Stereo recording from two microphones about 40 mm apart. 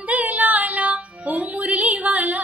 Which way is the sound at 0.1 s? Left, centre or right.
Right.